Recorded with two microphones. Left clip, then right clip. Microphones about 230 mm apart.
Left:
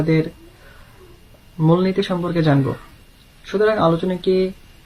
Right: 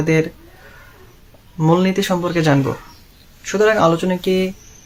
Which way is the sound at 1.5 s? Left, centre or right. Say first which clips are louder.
Right 2 dB; centre.